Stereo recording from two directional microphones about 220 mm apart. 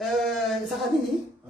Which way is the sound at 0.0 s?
Centre (ahead or behind).